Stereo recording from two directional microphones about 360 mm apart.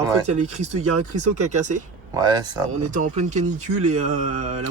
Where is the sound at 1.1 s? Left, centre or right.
Centre.